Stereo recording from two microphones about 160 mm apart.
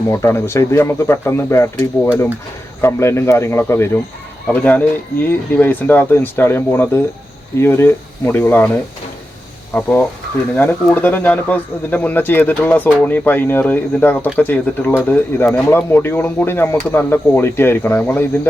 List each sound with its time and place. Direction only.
0.1 s speech: 15° left (ahead or behind)
2.8 s speech: 15° left (ahead or behind)
9.7 s speech: 10° left (ahead or behind)